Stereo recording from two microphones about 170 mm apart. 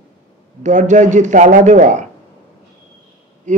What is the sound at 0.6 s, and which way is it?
A man's voice, 45° right (ahead or behind).